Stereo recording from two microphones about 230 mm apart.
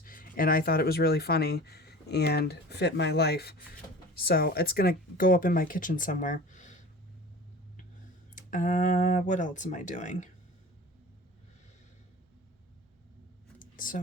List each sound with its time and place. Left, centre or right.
0.0 s speech: left
8.4 s speech: left
13.6 s a sound: left